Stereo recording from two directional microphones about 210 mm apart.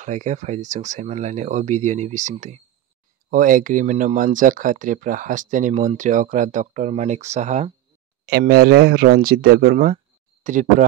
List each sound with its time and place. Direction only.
0.0 s speech: 35° right (ahead or behind)
8.3 s speech: 50° right (ahead or behind)